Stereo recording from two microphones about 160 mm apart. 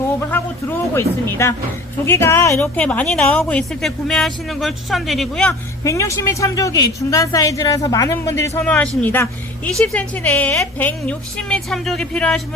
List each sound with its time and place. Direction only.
0.9 s a woman's voice: 15° left (ahead or behind)
5.8 s a woman's voice: 20° left (ahead or behind)
8.6 s a woman's voice: 10° left (ahead or behind)